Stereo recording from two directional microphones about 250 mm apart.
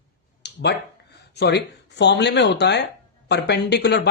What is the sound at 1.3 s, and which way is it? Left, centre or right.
Speech, left.